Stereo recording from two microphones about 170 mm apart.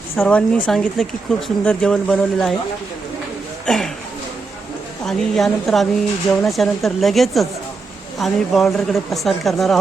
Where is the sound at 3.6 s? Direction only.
Centre (ahead or behind).